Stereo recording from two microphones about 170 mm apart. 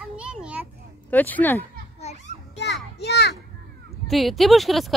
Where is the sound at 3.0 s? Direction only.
80° left.